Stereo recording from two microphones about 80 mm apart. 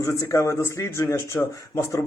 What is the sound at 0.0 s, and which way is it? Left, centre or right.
Speech, left.